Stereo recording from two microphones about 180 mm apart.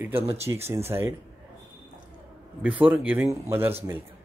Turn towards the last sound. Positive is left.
turn(degrees=-10)  # may be behind; listen again after turning